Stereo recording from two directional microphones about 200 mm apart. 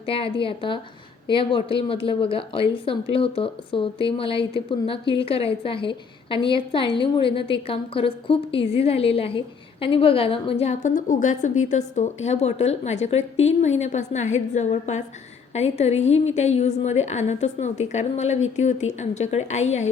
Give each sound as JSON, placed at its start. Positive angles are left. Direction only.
{"t": 0.0, "sound": "a woman's voice", "side_deg": 25}